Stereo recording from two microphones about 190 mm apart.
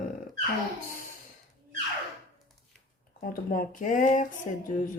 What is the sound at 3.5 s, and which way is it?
Speech, 45° left (ahead or behind).